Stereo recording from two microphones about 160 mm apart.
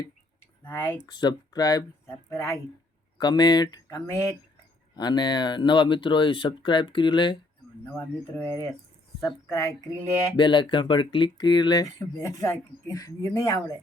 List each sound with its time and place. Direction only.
0.6 s speech: 15° left (ahead or behind)
1.0 s speech: 25° left (ahead or behind)
7.9 s speech: 10° left (ahead or behind)
9.2 s speech: 25° left (ahead or behind)